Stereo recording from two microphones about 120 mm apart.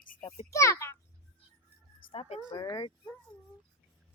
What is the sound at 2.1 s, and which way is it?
Speech, 55° left (ahead or behind).